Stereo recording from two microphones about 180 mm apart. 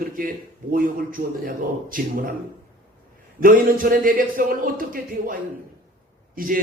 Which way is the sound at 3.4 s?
50° right (ahead or behind).